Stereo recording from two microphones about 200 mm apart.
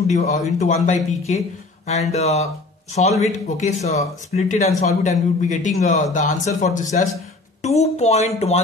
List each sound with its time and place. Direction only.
0.0 s speech: 35° left (ahead or behind)